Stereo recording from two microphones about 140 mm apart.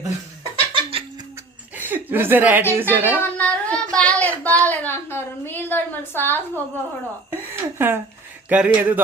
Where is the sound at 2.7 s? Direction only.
15° right (ahead or behind).